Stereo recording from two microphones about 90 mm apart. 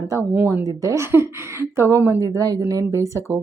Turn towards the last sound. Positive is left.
turn(degrees=-30)  # may be behind; listen again after turning